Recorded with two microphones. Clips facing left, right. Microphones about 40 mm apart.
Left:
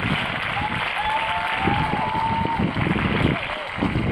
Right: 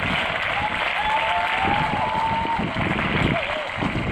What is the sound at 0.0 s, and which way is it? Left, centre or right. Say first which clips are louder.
Applause: right 1 dB; right.